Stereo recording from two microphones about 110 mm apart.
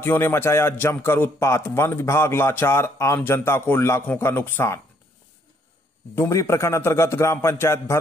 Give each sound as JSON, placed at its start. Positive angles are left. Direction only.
{"t": 0.0, "sound": "a man's voice", "side_deg": 20}
{"t": 6.1, "sound": "a man's voice", "side_deg": 25}